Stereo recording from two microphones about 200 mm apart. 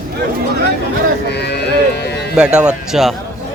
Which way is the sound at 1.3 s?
55° left (ahead or behind).